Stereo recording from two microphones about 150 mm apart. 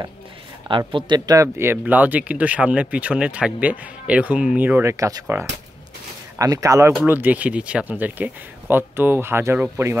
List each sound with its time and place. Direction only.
0.7 s speech: 30° right (ahead or behind)
6.3 s speech: 20° right (ahead or behind)